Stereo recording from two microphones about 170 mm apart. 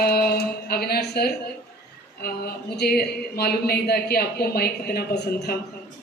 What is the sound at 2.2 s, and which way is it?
Speech, 70° left (ahead or behind).